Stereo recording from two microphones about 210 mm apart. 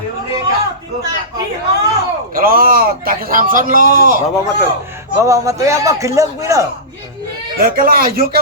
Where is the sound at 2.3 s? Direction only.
40° right (ahead or behind).